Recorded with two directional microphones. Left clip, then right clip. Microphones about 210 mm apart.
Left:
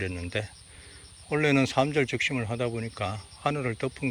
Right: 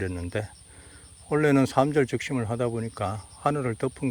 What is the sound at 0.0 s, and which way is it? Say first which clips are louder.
Speech: right 1 dB; 20° right (ahead or behind).